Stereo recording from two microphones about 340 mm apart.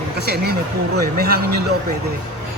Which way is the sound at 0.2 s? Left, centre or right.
Right.